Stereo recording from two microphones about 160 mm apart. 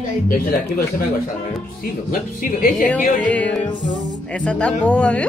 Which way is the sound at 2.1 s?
60° left (ahead or behind).